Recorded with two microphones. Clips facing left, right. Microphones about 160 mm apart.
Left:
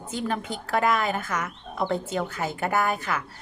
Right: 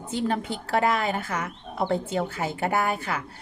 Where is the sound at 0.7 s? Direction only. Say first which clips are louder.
Even; 30° right (ahead or behind).